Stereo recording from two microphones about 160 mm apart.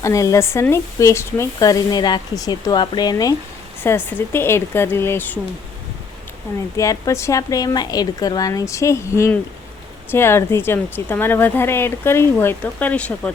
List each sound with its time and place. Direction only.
0.0 s speech: 20° left (ahead or behind)
3.8 s speech: 15° left (ahead or behind)
6.7 s speech: 20° left (ahead or behind)